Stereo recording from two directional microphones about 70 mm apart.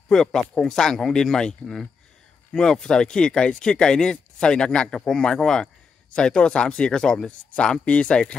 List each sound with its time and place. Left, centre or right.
0.1 s speech: centre